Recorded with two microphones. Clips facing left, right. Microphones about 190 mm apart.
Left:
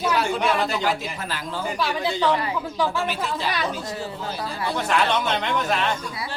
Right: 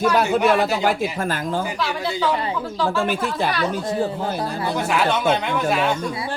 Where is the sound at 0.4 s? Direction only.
50° right (ahead or behind).